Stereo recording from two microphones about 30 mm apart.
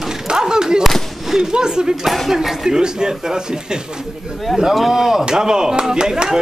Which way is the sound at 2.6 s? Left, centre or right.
Right.